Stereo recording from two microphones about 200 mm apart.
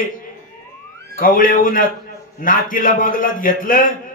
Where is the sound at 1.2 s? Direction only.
45° left (ahead or behind).